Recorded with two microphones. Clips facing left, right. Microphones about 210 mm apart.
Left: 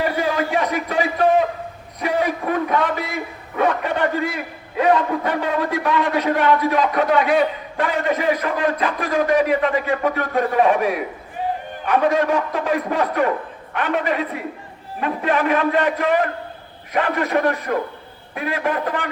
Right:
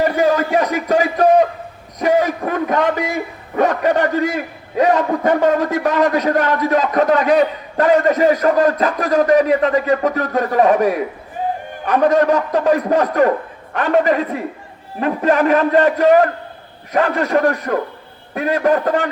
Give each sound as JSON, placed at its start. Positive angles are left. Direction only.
{"t": 0.0, "sound": "a man's voice", "side_deg": -40}
{"t": 2.0, "sound": "a sound", "side_deg": -45}
{"t": 3.6, "sound": "a man's voice", "side_deg": -40}